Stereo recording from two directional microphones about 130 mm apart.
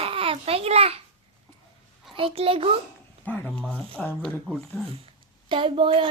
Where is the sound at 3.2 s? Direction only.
10° left (ahead or behind).